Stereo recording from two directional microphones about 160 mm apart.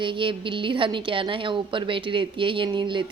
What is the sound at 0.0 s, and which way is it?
A woman's voice, 30° right (ahead or behind).